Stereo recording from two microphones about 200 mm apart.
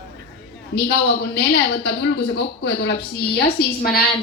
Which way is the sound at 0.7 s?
55° left (ahead or behind).